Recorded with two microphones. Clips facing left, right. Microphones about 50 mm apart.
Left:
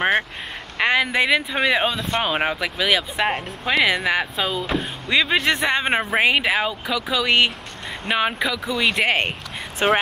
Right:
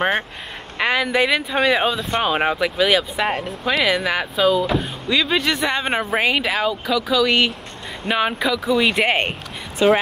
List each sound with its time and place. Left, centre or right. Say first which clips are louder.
0.7 s speech: even; centre
5.1 s speech: even; centre
5.8 s speech: left 1 dB; centre
9.8 s speech: right 4 dB; left